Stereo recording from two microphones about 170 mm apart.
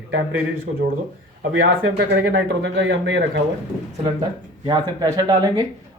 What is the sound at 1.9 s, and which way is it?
Speech, 85° right.